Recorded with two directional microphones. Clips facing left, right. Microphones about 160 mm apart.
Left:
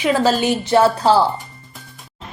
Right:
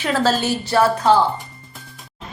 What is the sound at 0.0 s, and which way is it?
Speech, 15° left (ahead or behind).